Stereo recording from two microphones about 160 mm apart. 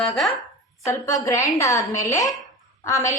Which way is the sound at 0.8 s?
20° left (ahead or behind).